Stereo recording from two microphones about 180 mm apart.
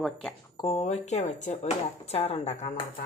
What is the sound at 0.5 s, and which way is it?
Speech, 30° left (ahead or behind).